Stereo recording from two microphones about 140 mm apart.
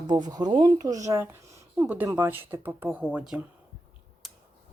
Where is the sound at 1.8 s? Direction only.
10° right (ahead or behind).